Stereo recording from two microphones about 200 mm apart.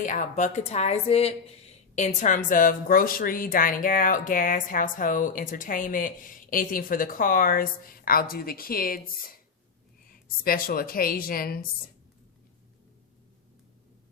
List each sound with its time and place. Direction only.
0.0 s speech: 40° left (ahead or behind)